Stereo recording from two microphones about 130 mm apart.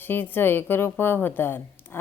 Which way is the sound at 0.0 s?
15° left (ahead or behind).